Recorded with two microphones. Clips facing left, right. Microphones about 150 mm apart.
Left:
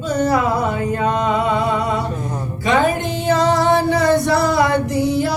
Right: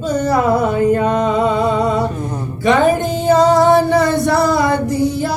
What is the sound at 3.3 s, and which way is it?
Music, 45° right (ahead or behind).